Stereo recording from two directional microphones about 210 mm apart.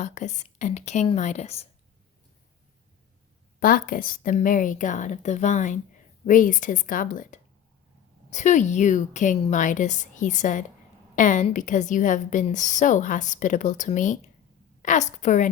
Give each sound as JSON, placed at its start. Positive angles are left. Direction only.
{"t": 0.0, "sound": "a woman's voice", "side_deg": 35}
{"t": 3.6, "sound": "a woman's voice", "side_deg": 45}